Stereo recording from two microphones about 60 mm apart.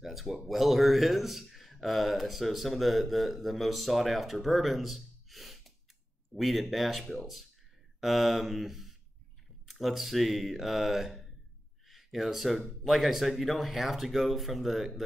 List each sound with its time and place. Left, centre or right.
0.0 s a man's voice: centre